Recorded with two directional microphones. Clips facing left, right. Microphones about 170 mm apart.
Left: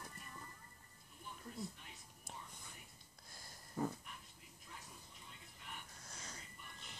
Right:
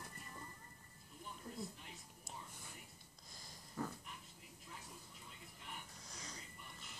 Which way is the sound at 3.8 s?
20° left (ahead or behind).